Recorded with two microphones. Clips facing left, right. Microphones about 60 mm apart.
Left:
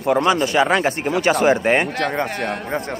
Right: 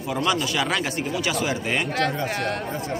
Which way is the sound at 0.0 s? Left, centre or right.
Left.